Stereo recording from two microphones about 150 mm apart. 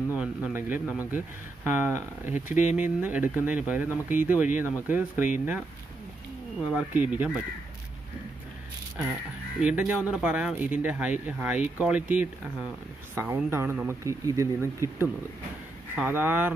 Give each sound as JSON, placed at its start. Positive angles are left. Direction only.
{"t": 0.1, "sound": "speech", "side_deg": -10}
{"t": 6.7, "sound": "speech", "side_deg": -10}
{"t": 9.6, "sound": "speech", "side_deg": -10}